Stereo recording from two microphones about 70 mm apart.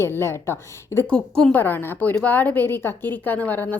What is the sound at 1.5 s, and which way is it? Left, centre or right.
A woman's voice, left.